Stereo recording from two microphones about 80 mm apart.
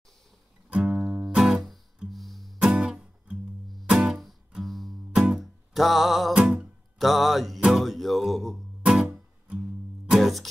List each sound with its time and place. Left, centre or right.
0.7 s music: centre
2.7 s music: centre